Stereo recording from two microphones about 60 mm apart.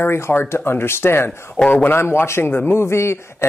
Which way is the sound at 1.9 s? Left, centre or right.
Left.